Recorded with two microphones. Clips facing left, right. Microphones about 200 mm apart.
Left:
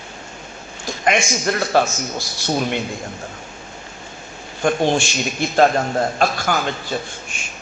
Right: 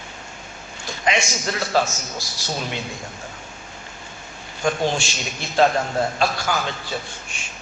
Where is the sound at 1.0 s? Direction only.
55° left (ahead or behind).